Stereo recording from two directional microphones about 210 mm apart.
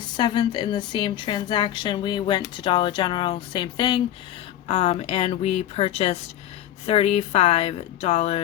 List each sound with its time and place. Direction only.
0.2 s a woman's voice: 20° left (ahead or behind)